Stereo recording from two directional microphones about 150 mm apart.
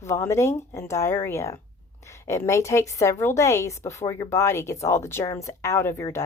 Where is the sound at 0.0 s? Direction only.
20° left (ahead or behind).